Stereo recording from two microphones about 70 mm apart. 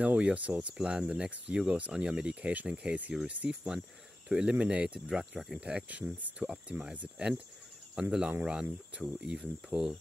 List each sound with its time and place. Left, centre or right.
0.0 s speech: centre